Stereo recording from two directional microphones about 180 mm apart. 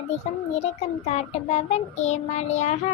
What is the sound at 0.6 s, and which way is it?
A child's voice, 40° left (ahead or behind).